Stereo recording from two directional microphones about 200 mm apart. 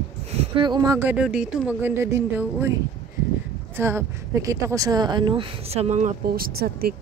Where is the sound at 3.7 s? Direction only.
15° right (ahead or behind); by 6.9 s 50° right (ahead or behind).